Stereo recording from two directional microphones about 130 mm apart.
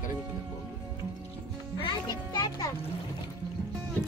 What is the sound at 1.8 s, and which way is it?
Speech, 35° left (ahead or behind).